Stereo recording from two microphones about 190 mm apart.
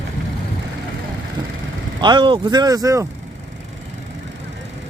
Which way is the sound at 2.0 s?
25° right (ahead or behind).